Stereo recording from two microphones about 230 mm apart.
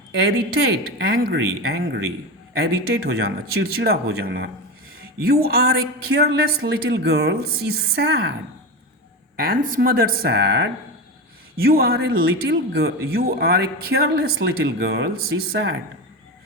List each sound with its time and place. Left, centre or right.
0.9 s speech: right
9.4 s speech: right